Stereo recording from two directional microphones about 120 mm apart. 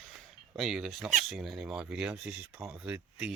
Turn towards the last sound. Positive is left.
turn(degrees=-5)  # may be behind; listen again after turning